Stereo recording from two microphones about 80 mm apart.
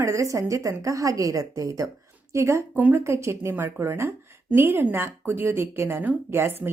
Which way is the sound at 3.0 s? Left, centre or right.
Right.